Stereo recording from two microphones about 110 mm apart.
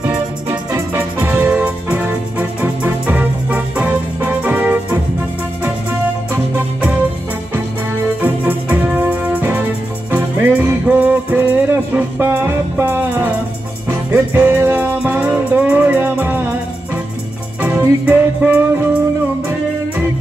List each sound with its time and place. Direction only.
0.5 s organ: 25° right (ahead or behind)
1.2 s music: 15° right (ahead or behind)
6.3 s music: 20° right (ahead or behind)
17.6 s music: 20° right (ahead or behind)